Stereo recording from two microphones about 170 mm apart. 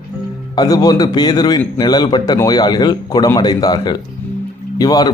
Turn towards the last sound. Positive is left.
turn(degrees=25)  # may be behind; listen again after turning